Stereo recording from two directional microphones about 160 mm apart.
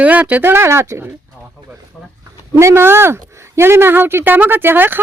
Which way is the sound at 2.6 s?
15° right (ahead or behind).